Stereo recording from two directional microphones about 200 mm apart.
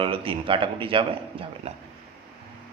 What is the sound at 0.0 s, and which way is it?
A man's voice, 25° right (ahead or behind).